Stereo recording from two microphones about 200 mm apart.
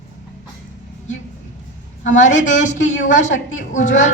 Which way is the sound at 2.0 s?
40° left (ahead or behind).